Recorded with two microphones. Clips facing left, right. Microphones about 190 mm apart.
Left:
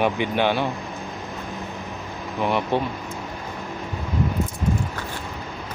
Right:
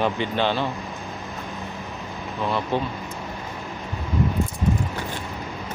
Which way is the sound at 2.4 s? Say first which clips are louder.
Left 2 dB; 20° left (ahead or behind).